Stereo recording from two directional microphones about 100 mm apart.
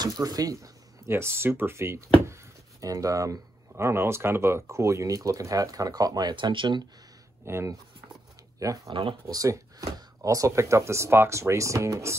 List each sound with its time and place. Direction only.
0.0 s speech: 40° right (ahead or behind)
7.4 s speech: 30° right (ahead or behind)